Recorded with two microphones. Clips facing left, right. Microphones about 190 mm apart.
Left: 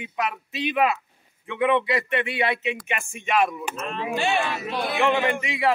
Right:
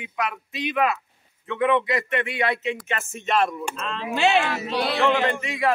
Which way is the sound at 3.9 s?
85° right.